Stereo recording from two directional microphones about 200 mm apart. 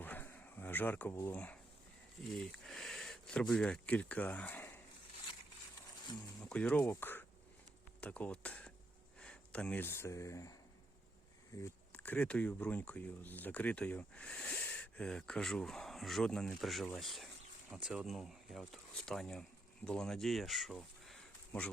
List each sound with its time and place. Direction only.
0.0 s a sound: 10° left (ahead or behind)
2.3 s speech: centre (ahead or behind)
6.4 s speech: 5° left (ahead or behind)
11.5 s speech: 10° left (ahead or behind)